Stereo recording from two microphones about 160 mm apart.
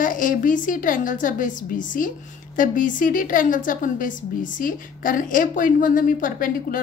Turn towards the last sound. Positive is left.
turn(degrees=60)  # may be behind; listen again after turning